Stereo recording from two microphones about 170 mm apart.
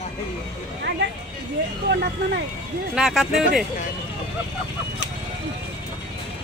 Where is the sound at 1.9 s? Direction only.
75° right (ahead or behind).